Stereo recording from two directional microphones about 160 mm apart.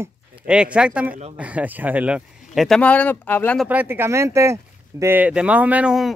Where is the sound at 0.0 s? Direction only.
5° right (ahead or behind); by 3.6 s 10° left (ahead or behind).